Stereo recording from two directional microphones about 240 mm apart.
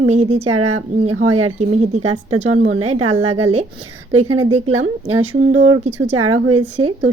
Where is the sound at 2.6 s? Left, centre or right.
Right.